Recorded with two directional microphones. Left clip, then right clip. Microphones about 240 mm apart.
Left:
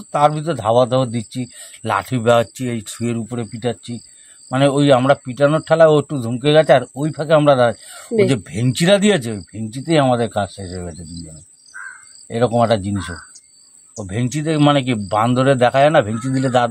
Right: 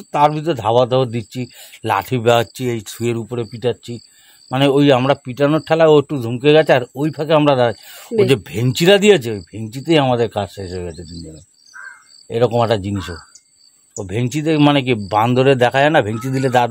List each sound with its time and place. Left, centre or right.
0.0 s a man's voice: right
12.3 s a man's voice: right